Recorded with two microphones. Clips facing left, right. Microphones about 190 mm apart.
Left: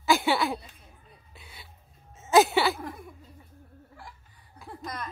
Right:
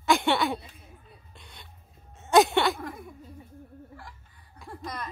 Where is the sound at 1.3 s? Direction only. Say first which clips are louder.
Left 3 dB; 5° left (ahead or behind).